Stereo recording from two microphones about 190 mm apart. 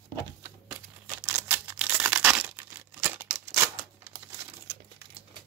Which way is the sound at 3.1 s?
10° right (ahead or behind).